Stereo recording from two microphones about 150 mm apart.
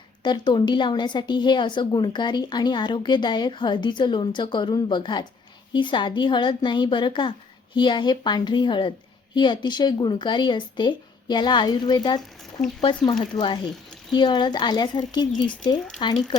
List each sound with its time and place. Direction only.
0.2 s a woman's voice: 30° left (ahead or behind)